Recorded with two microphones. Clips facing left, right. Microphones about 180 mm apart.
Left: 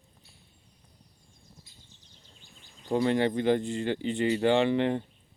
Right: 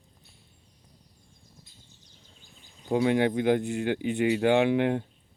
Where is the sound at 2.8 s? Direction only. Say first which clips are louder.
Right 2 dB; 10° right (ahead or behind).